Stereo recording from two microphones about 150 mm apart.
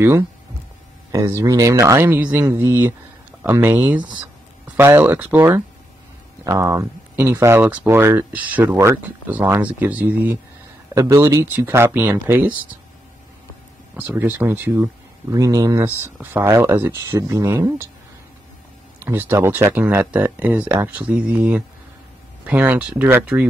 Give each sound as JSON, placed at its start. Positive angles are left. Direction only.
{"t": 1.3, "sound": "speech", "side_deg": -20}
{"t": 13.9, "sound": "speech", "side_deg": -15}
{"t": 19.0, "sound": "speech", "side_deg": -15}